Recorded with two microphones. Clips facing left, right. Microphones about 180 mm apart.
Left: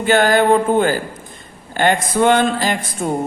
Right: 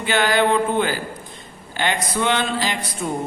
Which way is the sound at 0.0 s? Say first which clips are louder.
Left 5 dB; 45° left (ahead or behind).